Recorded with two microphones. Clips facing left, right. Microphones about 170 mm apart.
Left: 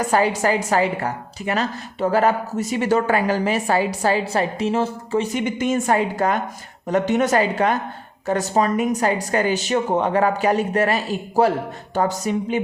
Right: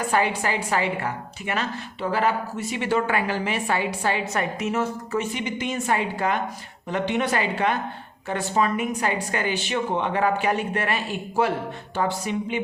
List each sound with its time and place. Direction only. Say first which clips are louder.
0.1 s a woman's voice: left 5 dB; 40° left (ahead or behind)
5.3 s a woman's voice: left 7 dB; 50° left (ahead or behind)